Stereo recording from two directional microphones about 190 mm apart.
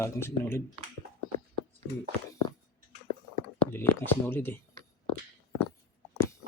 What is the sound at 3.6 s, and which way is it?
Speech, 10° left (ahead or behind).